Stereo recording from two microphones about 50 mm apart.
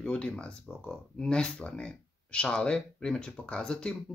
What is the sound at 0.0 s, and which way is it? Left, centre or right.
Speech, centre.